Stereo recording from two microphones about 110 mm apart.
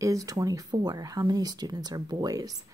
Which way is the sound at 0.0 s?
30° right (ahead or behind).